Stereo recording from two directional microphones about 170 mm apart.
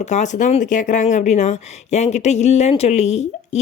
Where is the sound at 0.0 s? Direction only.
45° left (ahead or behind).